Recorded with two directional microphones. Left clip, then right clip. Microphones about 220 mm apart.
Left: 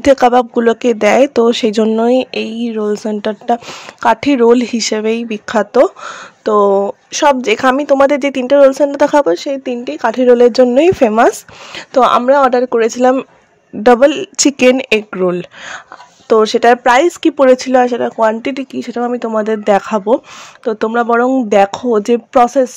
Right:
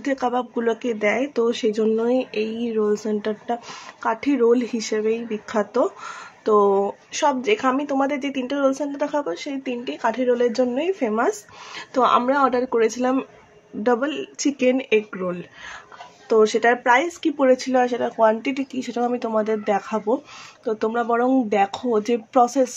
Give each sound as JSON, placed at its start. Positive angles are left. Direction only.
{"t": 0.0, "sound": "speech", "side_deg": 45}